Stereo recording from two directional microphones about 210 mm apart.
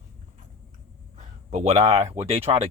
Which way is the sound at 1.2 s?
30° right (ahead or behind).